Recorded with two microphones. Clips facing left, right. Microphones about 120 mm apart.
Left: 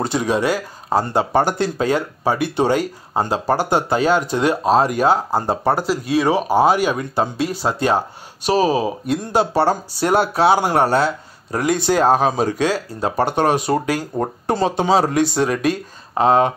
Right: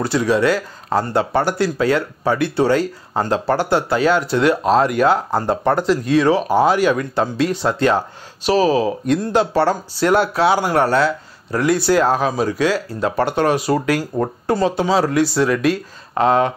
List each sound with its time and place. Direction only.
0.0 s speech: 20° left (ahead or behind)